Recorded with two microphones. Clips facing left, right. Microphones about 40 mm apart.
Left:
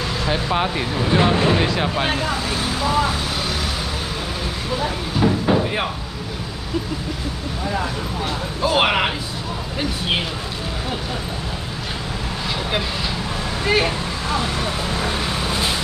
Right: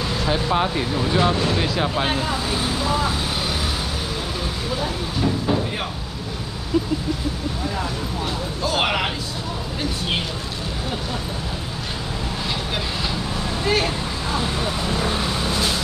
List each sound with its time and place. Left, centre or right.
0.2 s speech: centre
1.8 s speech: centre
4.8 s speech: left
8.6 s speech: centre
13.7 s speech: centre